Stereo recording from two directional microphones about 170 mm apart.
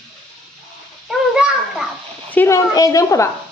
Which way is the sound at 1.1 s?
5° right (ahead or behind).